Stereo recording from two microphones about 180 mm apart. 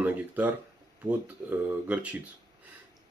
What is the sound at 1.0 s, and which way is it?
Speech, 10° right (ahead or behind).